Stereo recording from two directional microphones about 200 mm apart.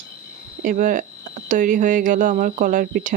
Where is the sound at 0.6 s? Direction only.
40° right (ahead or behind).